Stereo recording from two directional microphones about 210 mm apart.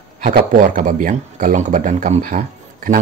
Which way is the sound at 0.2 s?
40° right (ahead or behind).